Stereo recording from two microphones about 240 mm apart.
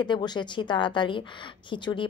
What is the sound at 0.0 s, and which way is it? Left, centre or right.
A woman's voice, centre.